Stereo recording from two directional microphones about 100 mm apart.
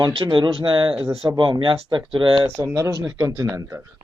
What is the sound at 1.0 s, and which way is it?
Speech, 35° right (ahead or behind).